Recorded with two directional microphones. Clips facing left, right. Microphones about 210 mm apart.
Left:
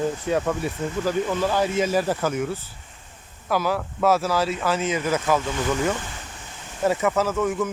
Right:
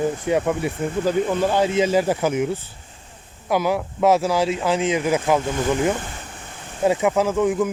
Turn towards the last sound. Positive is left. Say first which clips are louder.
# right 4 dB
turn(degrees=-15)  # may be behind; listen again after turning